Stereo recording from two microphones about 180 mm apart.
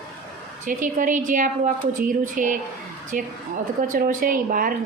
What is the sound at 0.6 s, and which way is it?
Speech, 45° right (ahead or behind).